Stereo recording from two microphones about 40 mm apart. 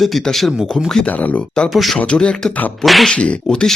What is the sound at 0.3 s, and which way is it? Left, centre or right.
Speech, centre.